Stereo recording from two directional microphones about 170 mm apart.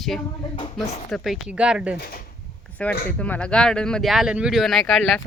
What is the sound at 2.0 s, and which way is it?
Speech, 60° left (ahead or behind).